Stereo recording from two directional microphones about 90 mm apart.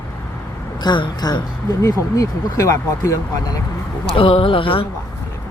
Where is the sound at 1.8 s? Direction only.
40° left (ahead or behind).